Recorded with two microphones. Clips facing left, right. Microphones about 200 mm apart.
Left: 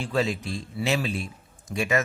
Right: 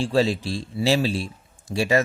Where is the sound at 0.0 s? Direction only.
30° right (ahead or behind).